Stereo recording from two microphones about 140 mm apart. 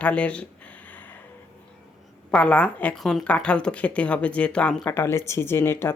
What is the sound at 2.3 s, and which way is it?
Speech, 10° left (ahead or behind).